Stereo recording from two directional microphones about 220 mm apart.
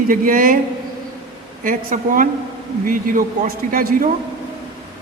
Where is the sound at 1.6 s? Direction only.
40° right (ahead or behind).